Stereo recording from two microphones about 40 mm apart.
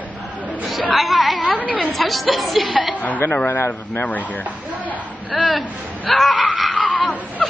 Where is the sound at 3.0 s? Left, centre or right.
Left.